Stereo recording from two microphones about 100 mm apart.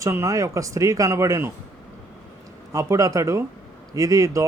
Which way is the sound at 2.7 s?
35° right (ahead or behind).